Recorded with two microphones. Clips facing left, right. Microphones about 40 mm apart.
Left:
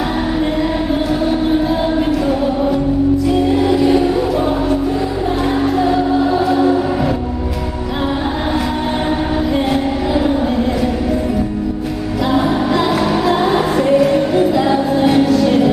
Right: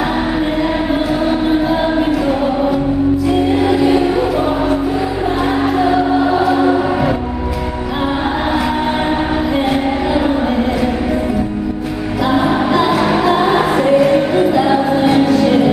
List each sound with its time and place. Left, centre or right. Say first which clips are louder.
3.6 s music: even; centre
5.8 s music: right 2 dB; centre
12.7 s music: right 2 dB; centre